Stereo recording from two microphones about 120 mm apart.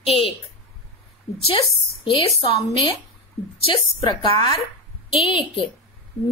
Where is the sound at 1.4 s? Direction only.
45° left (ahead or behind).